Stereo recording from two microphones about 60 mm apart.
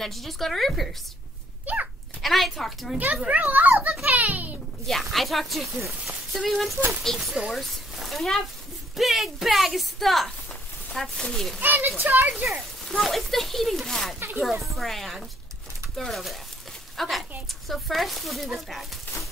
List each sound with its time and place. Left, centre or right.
0.0 s a woman's voice: centre
1.7 s a child's voice: right
2.2 s a woman's voice: centre
3.3 s a child's voice: right
4.8 s a woman's voice: centre
7.6 s a sound: centre
8.9 s a woman's voice: centre
11.6 s a child's voice: right
12.8 s a woman's voice: centre